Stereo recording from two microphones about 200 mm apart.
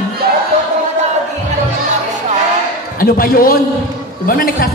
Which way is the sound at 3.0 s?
45° left (ahead or behind).